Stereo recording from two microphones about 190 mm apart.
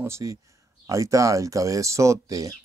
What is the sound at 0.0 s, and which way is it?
Speech, 15° right (ahead or behind).